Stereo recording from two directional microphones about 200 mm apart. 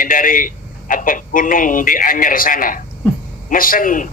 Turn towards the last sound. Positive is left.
turn(degrees=40)  # may be behind; listen again after turning